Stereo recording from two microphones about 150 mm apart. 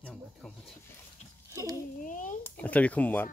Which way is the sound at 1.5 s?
20° right (ahead or behind).